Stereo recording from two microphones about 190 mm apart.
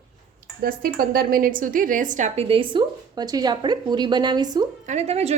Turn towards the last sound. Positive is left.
turn(degrees=-35)  # may be behind; listen again after turning